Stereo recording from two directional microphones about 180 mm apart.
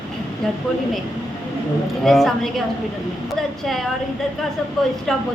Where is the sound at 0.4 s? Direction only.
5° left (ahead or behind).